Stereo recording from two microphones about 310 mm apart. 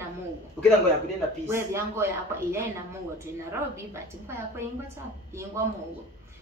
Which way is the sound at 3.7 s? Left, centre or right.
Centre.